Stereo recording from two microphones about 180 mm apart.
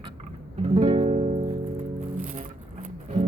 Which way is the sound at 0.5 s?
40° right (ahead or behind).